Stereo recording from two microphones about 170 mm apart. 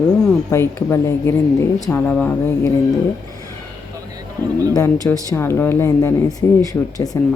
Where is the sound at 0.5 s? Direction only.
15° left (ahead or behind).